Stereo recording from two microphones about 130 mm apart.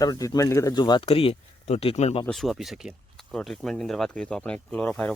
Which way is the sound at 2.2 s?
Centre (ahead or behind).